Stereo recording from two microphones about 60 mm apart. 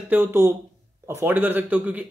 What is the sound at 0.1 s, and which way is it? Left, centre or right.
Speech, right.